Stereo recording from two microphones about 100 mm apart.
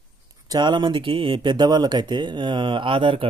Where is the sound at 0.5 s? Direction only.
45° right (ahead or behind).